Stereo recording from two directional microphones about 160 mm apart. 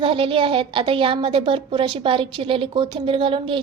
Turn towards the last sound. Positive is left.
turn(degrees=-30)  # may be behind; listen again after turning